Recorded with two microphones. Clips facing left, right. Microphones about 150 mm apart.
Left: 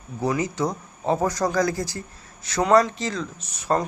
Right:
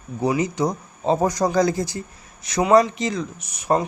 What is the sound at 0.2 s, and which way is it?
Speech, 20° right (ahead or behind).